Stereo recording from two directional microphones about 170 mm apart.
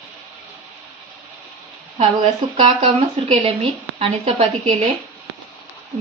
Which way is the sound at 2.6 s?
35° right (ahead or behind).